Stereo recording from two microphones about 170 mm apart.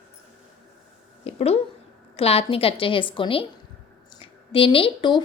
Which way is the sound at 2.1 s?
35° left (ahead or behind).